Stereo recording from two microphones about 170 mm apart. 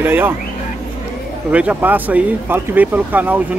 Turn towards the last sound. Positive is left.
turn(degrees=-10)  # may be behind; listen again after turning